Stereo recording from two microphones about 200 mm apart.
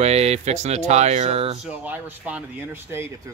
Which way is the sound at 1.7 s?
5° right (ahead or behind).